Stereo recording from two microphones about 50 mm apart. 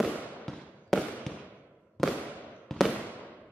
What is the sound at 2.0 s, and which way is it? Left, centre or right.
Fireworks, centre.